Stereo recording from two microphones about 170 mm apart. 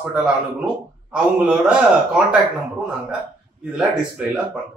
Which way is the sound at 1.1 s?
5° right (ahead or behind).